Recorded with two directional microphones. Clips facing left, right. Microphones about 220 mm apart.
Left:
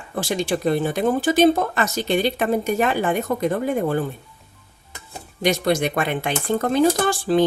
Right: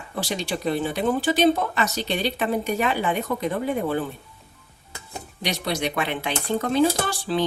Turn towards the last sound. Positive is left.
turn(degrees=50)  # may be behind; listen again after turning